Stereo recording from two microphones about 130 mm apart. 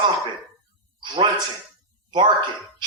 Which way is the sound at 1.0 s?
40° right (ahead or behind).